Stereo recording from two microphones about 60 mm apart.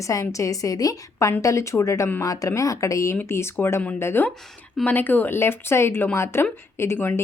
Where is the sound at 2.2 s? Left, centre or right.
Left.